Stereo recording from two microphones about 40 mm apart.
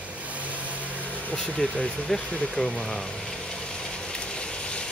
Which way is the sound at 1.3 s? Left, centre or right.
Left.